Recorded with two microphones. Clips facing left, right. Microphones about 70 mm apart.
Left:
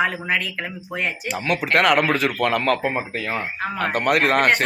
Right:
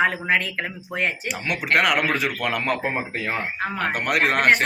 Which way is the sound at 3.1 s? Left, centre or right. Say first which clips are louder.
Left 1 dB; right.